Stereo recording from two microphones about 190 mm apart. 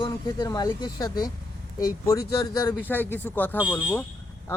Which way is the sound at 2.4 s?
20° left (ahead or behind).